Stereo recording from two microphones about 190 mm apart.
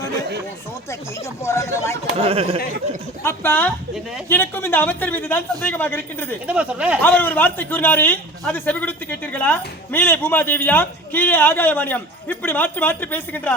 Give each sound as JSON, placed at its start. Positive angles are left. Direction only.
{"t": 1.5, "sound": "a man's voice", "side_deg": 15}
{"t": 2.1, "sound": "speech", "side_deg": -30}
{"t": 3.2, "sound": "a man's voice", "side_deg": 10}
{"t": 6.5, "sound": "speech", "side_deg": -5}
{"t": 7.0, "sound": "a man's voice", "side_deg": 10}